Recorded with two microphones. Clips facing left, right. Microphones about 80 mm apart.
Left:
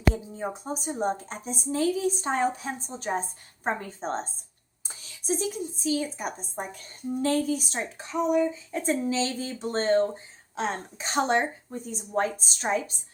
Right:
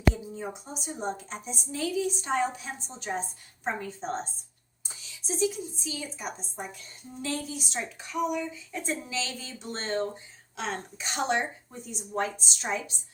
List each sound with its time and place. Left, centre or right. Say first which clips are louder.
0.1 s a woman's voice: left 4 dB; left
5.0 s a sound: even; left
5.8 s a woman's voice: left 11 dB; left